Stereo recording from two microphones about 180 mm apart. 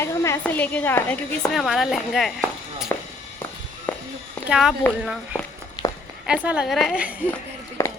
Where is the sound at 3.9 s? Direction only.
5° left (ahead or behind).